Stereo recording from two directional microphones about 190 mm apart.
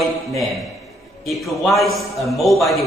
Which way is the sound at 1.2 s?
Centre (ahead or behind).